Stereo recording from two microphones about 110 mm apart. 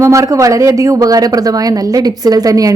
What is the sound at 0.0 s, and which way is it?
Speech, 25° right (ahead or behind).